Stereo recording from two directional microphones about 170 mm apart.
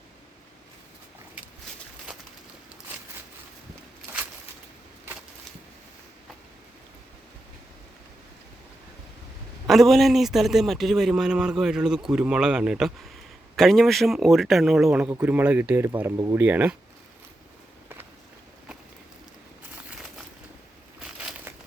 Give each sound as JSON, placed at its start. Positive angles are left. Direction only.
{"t": 9.6, "sound": "speech", "side_deg": 0}
{"t": 19.9, "sound": "a sound", "side_deg": 0}
{"t": 21.2, "sound": "crumpling", "side_deg": -5}